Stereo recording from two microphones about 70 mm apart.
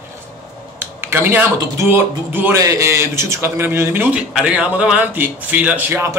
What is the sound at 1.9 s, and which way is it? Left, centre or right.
Speech, right.